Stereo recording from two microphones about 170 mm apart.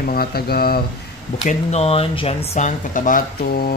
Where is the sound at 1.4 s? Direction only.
40° left (ahead or behind); by 3.7 s 60° left (ahead or behind).